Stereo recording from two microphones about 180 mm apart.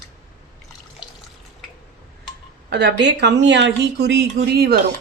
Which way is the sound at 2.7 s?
70° right (ahead or behind).